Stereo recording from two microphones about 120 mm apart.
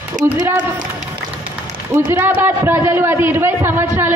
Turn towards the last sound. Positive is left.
turn(degrees=-20)  # may be behind; listen again after turning